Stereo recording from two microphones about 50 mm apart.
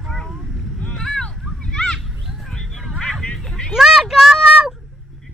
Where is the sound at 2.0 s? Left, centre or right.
Centre.